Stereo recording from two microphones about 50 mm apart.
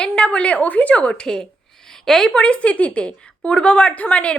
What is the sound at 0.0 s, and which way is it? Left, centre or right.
A woman's voice, left.